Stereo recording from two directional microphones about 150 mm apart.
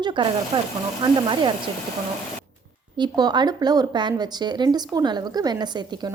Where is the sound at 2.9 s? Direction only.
30° right (ahead or behind).